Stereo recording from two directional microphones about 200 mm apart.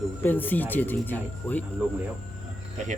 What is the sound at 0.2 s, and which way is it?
Speech, 10° left (ahead or behind).